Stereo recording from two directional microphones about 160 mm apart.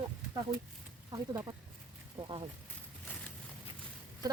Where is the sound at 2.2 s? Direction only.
10° right (ahead or behind).